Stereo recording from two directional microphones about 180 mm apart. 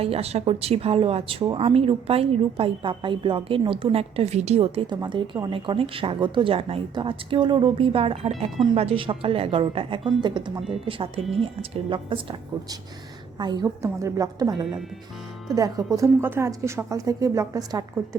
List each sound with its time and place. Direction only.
0.0 s a woman's voice: 35° right (ahead or behind)
13.4 s a woman's voice: 25° right (ahead or behind)